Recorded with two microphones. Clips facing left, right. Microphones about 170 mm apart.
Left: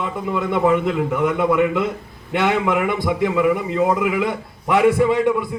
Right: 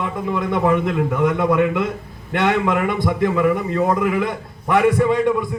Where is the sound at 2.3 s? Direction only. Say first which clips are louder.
Even; 10° left (ahead or behind).